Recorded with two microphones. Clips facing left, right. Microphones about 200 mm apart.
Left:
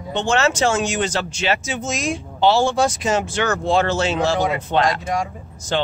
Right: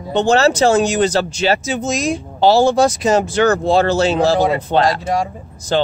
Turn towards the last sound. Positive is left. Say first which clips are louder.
# right 5 dB
turn(degrees=-35)  # may be behind; listen again after turning